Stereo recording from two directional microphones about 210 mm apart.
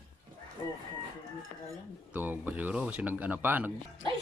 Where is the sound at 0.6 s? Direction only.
20° left (ahead or behind).